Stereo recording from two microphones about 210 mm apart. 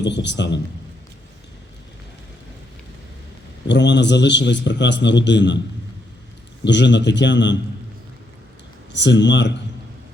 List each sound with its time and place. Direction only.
0.0 s a man's voice: 55° left (ahead or behind)
3.7 s a man's voice: 55° left (ahead or behind)
6.7 s a man's voice: 60° left (ahead or behind)
8.9 s a man's voice: 55° left (ahead or behind)